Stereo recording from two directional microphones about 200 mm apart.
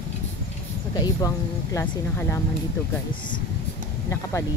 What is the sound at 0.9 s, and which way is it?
Speech, 20° left (ahead or behind).